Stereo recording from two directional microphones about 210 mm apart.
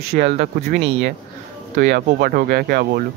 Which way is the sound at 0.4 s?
50° right (ahead or behind).